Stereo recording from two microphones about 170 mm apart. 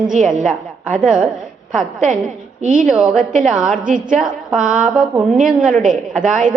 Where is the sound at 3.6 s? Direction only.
50° right (ahead or behind).